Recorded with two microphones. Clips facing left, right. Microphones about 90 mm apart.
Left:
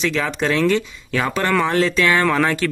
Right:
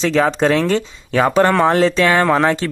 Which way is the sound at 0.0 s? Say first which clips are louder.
Right 6 dB; 35° right (ahead or behind).